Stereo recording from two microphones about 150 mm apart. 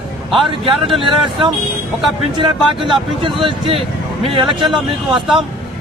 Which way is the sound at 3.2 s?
35° right (ahead or behind).